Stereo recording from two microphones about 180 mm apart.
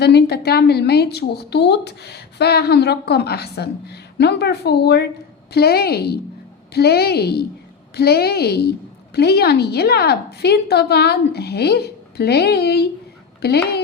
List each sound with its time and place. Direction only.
0.0 s a woman's voice: 65° left (ahead or behind)